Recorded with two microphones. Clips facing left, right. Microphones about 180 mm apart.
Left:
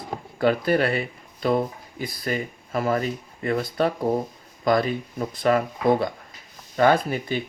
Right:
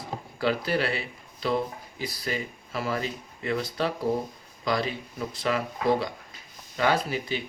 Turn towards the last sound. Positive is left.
turn(degrees=50)  # may be behind; listen again after turning